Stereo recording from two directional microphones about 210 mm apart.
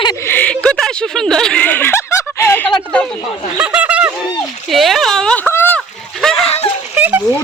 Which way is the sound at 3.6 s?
5° right (ahead or behind).